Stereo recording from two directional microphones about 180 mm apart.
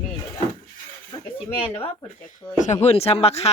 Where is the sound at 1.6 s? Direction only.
30° left (ahead or behind).